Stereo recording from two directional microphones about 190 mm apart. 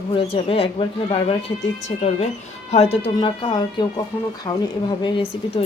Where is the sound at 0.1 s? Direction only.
30° left (ahead or behind).